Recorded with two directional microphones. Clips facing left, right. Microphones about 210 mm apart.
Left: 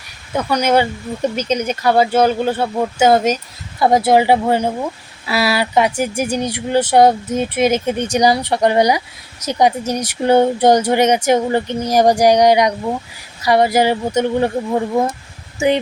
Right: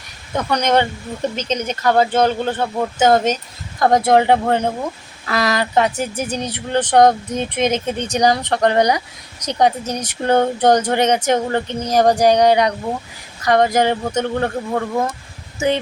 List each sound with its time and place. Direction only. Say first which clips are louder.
0.3 s speech: left 2 dB; 5° left (ahead or behind)
14.1 s speech: left 4 dB; 20° left (ahead or behind)